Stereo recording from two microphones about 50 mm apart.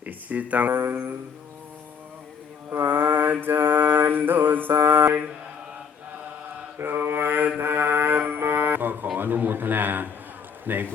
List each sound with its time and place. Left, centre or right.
0.0 s a sound: right
0.7 s mantra: right
2.6 s mantra: right
6.7 s mantra: right
8.4 s music: right
9.1 s a man's voice: right